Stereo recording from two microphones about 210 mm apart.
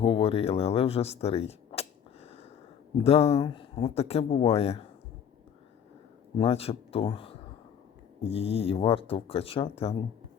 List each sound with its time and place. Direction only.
0.0 s speech: 25° left (ahead or behind)
6.4 s speech: 30° left (ahead or behind)